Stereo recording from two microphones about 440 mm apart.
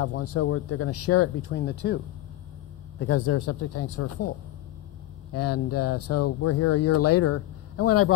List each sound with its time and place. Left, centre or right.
0.0 s speech: left
3.0 s speech: left
5.3 s speech: left